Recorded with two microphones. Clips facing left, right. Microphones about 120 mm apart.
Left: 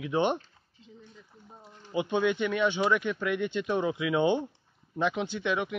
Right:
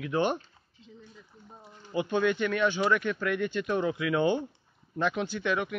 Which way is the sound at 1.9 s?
15° left (ahead or behind).